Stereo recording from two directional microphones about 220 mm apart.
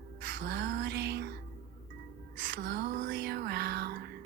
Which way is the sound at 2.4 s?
55° right (ahead or behind).